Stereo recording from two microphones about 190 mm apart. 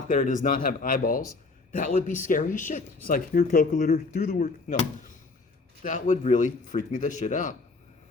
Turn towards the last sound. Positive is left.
turn(degrees=40)  # may be behind; listen again after turning